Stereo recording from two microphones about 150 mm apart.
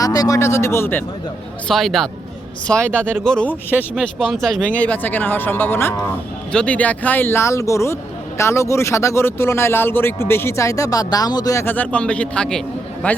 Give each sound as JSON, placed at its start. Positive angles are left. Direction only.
{"t": 0.0, "sound": "speech", "side_deg": 25}
{"t": 1.6, "sound": "speech", "side_deg": 0}
{"t": 3.9, "sound": "speech", "side_deg": 0}